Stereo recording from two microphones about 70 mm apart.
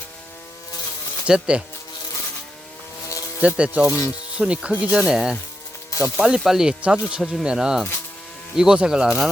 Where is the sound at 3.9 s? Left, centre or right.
Left.